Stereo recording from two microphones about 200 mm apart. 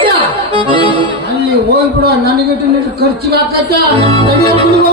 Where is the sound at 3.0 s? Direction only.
50° right (ahead or behind).